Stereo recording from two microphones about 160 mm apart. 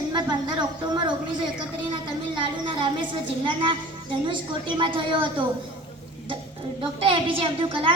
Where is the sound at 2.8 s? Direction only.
30° right (ahead or behind).